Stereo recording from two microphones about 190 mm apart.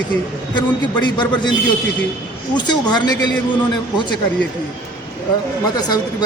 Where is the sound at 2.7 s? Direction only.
20° left (ahead or behind).